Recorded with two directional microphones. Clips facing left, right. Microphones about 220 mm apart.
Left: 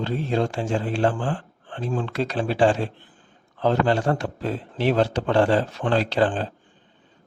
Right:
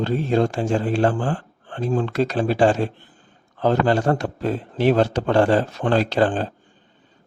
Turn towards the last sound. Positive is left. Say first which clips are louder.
# right 2 dB
turn(degrees=-45)  # may be behind; listen again after turning